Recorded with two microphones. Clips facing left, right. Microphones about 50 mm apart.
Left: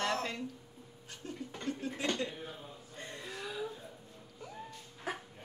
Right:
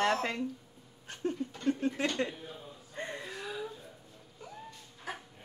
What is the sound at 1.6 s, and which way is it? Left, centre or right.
Speech, right.